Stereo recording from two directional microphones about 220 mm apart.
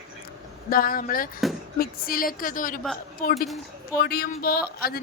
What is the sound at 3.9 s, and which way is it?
Speech, 45° left (ahead or behind).